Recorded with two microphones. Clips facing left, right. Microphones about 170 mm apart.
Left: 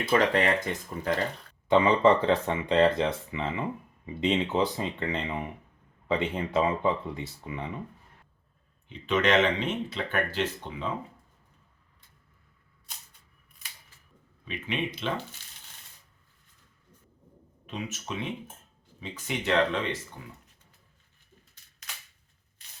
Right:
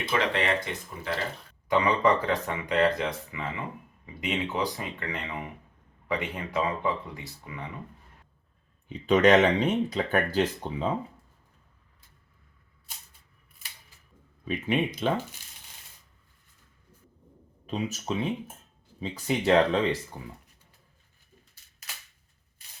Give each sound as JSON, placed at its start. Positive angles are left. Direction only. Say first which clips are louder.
{"t": 0.1, "sound": "speech", "louder": "left 3 dB", "side_deg": 45}
{"t": 1.6, "sound": "speech", "louder": "left 3 dB", "side_deg": 25}
{"t": 8.9, "sound": "speech", "louder": "right 5 dB", "side_deg": -40}
{"t": 14.4, "sound": "speech", "louder": "right 5 dB", "side_deg": -45}
{"t": 17.7, "sound": "speech", "louder": "right 5 dB", "side_deg": -35}